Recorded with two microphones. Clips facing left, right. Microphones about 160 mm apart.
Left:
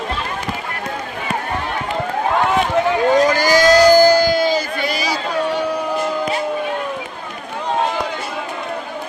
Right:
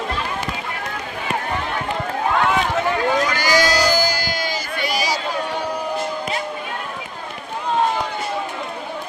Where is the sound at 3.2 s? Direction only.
45° left (ahead or behind).